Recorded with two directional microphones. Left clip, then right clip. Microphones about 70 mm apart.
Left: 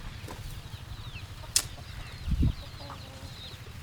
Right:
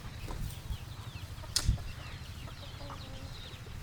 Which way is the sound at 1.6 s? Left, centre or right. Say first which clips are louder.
Left 4 dB; left.